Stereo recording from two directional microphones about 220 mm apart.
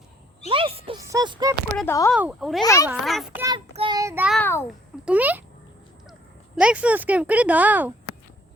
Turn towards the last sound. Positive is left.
turn(degrees=-5)  # may be behind; listen again after turning